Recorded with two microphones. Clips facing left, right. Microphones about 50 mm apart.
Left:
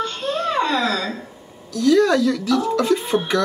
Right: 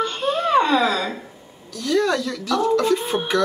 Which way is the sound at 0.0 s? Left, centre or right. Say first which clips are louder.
Right 1 dB; right.